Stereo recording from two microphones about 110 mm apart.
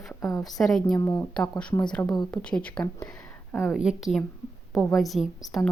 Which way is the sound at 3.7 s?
5° right (ahead or behind).